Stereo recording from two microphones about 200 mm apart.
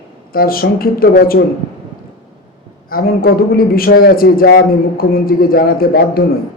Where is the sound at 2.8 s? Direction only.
45° left (ahead or behind).